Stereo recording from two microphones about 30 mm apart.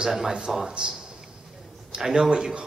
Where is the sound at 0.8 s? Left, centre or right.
Right.